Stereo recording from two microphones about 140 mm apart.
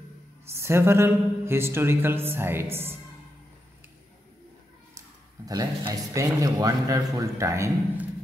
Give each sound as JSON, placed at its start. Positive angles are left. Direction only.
{"t": 0.5, "sound": "speech", "side_deg": -20}
{"t": 4.9, "sound": "speech", "side_deg": -25}